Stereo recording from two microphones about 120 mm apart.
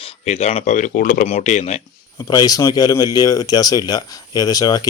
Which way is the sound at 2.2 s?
30° left (ahead or behind).